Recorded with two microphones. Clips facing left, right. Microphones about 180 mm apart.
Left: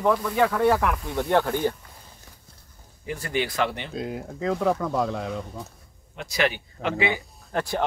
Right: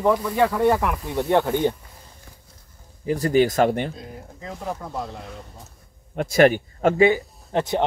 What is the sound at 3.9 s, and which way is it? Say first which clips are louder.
Speech: left 7 dB; 90° left.